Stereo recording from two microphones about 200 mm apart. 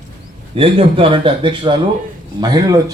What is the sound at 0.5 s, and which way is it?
Speech, 25° right (ahead or behind).